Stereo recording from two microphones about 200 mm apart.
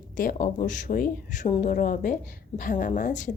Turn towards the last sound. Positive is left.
turn(degrees=40)  # may be behind; listen again after turning